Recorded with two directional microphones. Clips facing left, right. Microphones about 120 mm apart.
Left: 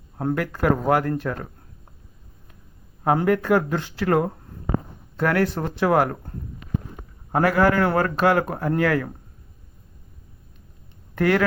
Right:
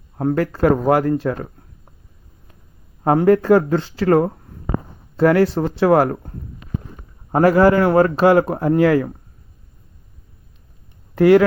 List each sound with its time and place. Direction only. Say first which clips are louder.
0.3 s speech: right 6 dB; 25° right (ahead or behind)
3.0 s speech: right 6 dB; 25° right (ahead or behind)
11.1 s speech: right 9 dB; 20° right (ahead or behind)